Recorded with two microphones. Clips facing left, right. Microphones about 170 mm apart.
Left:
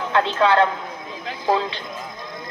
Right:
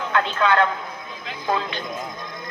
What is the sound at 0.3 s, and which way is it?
A man's voice, 30° left (ahead or behind).